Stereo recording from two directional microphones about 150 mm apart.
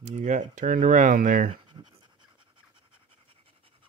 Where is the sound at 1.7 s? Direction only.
30° right (ahead or behind).